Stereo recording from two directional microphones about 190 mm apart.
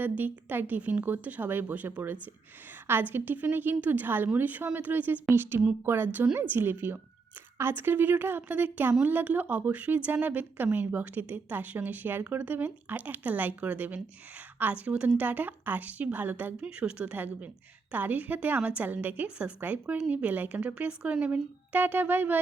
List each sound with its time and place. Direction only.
0.0 s speech: 10° right (ahead or behind)